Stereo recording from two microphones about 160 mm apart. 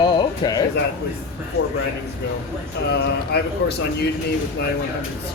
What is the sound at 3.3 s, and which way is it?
Speech, 90° left.